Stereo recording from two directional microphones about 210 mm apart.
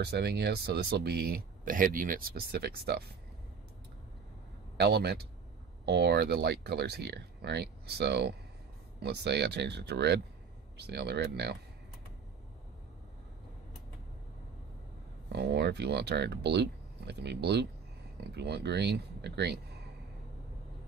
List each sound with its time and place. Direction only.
0.0 s speech: 50° right (ahead or behind)
4.7 s speech: 50° right (ahead or behind)
15.3 s speech: 55° right (ahead or behind)